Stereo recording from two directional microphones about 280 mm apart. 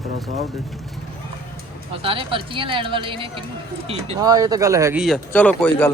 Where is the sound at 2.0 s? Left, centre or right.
Centre.